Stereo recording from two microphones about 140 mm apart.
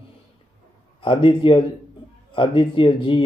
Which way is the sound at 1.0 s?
40° left (ahead or behind).